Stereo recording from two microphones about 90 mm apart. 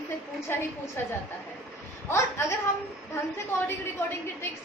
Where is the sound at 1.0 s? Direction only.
25° left (ahead or behind).